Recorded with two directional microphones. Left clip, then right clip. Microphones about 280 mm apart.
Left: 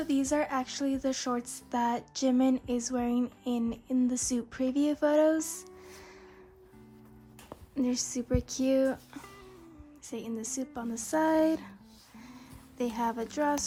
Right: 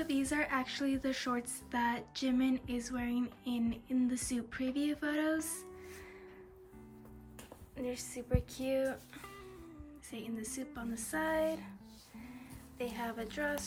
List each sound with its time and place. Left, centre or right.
0.1 s speech: centre
7.9 s speech: left
12.7 s speech: centre